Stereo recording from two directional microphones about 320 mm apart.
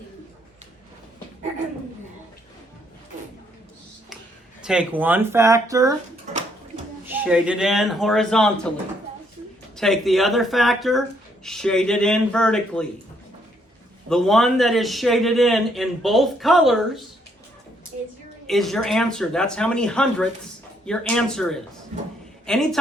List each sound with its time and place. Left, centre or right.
4.6 s speech: centre
7.0 s a man's voice: centre
14.1 s a man's voice: centre
18.4 s a man's voice: centre
21.9 s a man's voice: centre
22.4 s a man's voice: centre